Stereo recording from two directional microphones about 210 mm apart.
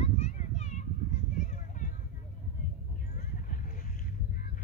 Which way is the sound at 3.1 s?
40° left (ahead or behind).